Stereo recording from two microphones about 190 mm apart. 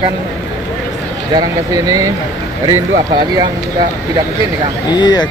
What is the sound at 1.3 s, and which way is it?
Speech, 20° right (ahead or behind).